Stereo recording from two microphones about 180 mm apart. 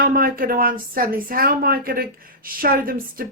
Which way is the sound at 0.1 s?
55° right (ahead or behind).